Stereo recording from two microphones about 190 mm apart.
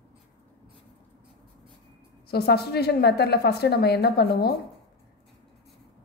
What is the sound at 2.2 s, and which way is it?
A woman's voice, 55° left (ahead or behind).